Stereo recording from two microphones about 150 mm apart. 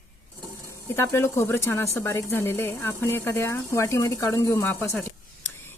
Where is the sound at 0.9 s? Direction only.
15° left (ahead or behind).